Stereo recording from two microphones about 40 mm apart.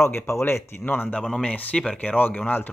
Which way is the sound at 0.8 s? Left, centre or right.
Left.